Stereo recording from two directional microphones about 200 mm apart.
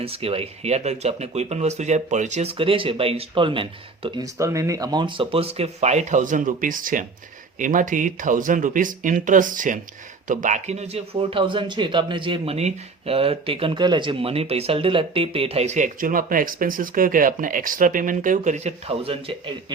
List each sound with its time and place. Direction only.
0.0 s speech: 30° right (ahead or behind)